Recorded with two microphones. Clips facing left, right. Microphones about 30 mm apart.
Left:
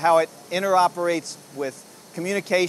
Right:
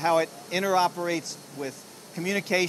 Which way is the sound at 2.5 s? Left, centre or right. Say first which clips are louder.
Left 4 dB; left.